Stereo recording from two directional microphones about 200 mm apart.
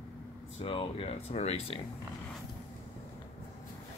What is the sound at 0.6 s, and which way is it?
Speech, 25° left (ahead or behind).